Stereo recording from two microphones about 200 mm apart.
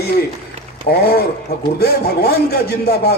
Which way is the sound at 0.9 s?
50° left (ahead or behind).